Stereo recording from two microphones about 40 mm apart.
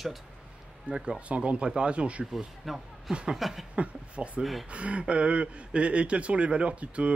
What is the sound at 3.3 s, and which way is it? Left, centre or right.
Speech, centre.